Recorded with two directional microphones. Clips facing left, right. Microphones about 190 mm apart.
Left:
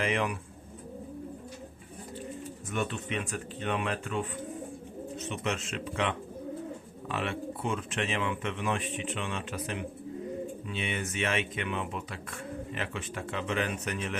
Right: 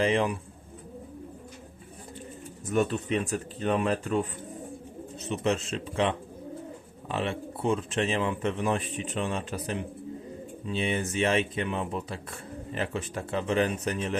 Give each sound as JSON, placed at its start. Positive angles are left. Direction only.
{"t": 0.0, "sound": "speech", "side_deg": -30}
{"t": 2.6, "sound": "speech", "side_deg": -35}